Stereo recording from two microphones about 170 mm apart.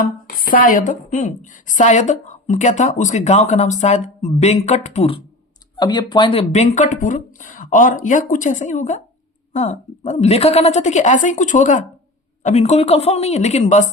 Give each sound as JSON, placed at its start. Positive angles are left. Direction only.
{"t": 0.0, "sound": "a woman's voice", "side_deg": 55}
{"t": 5.7, "sound": "speech", "side_deg": 25}
{"t": 6.5, "sound": "a woman's voice", "side_deg": 45}